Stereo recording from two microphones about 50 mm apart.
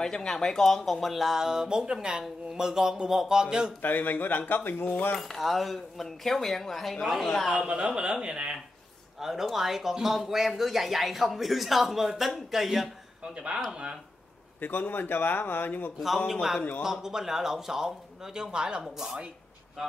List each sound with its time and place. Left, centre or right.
0.0 s speech: centre
3.8 s speech: left
5.1 s speech: centre
7.4 s speech: right; by 12.9 s centre
13.2 s speech: right
14.6 s a man's voice: left
16.3 s speech: centre